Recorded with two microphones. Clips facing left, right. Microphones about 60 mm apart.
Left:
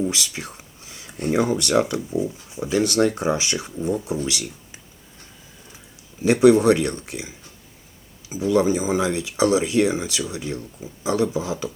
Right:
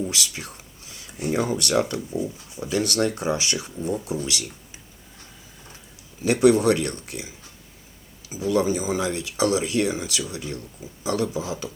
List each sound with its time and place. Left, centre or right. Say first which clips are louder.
0.1 s a sound: left 2 dB; left
1.1 s speech: left 3 dB; centre
1.4 s speech: left 3 dB; left
6.2 s speech: left 3 dB; left
8.4 s speech: left 3 dB; left